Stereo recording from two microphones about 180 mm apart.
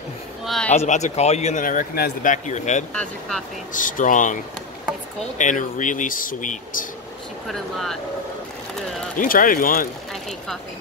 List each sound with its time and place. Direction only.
0.7 s speech: 40° left (ahead or behind)
2.9 s speech: 5° left (ahead or behind)
3.7 s speech: 45° left (ahead or behind)
5.4 s speech: 45° left (ahead or behind)
7.4 s speech: centre (ahead or behind)
9.2 s speech: 50° left (ahead or behind)